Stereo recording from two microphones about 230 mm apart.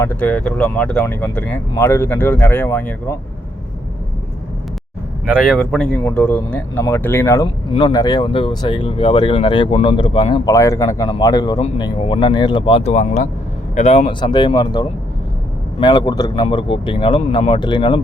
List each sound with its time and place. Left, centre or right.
0.0 s speech: centre
5.2 s speech: centre
7.4 s speech: left